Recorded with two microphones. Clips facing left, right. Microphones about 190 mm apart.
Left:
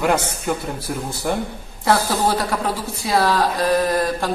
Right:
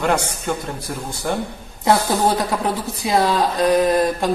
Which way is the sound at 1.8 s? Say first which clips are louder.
Right 1 dB; 20° right (ahead or behind).